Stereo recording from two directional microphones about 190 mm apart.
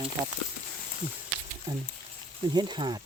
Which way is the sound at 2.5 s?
20° right (ahead or behind).